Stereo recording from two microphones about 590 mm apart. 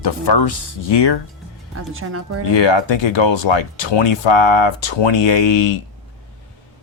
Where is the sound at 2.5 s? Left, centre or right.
Left.